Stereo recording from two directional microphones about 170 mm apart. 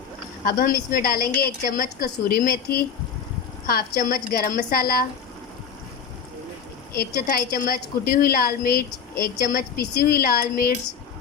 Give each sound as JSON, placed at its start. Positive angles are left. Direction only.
{"t": 0.4, "sound": "a woman's voice", "side_deg": 60}
{"t": 6.9, "sound": "a woman's voice", "side_deg": 60}